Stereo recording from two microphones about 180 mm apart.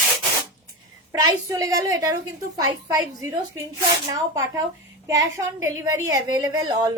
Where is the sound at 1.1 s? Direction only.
20° right (ahead or behind).